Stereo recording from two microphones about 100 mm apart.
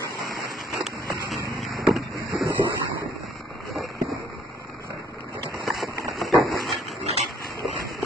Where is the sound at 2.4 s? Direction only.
35° right (ahead or behind).